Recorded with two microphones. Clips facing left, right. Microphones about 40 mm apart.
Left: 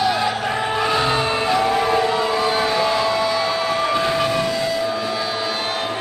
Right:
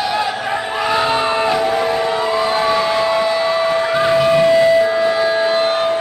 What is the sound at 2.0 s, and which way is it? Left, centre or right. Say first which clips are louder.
Siren: right 2 dB; centre.